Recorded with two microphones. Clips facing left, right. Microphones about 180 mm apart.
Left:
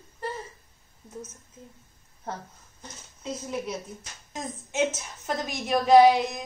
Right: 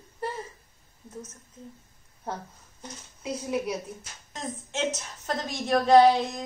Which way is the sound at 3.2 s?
10° right (ahead or behind).